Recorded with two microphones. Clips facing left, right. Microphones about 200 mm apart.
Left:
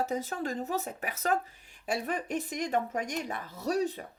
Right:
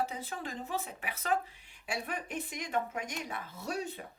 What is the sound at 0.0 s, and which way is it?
Speech, 45° left (ahead or behind).